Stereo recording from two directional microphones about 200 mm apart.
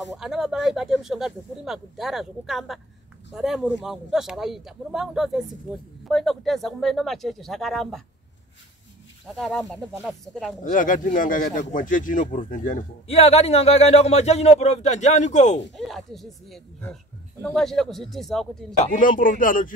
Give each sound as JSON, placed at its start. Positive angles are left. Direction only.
{"t": 0.2, "sound": "speech", "side_deg": 0}
{"t": 9.4, "sound": "speech", "side_deg": 0}
{"t": 10.6, "sound": "speech", "side_deg": 40}
{"t": 15.7, "sound": "speech", "side_deg": 0}
{"t": 18.8, "sound": "a man's voice", "side_deg": 45}